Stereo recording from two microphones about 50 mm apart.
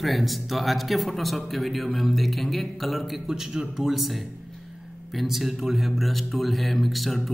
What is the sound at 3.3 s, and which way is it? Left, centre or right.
Speech, centre.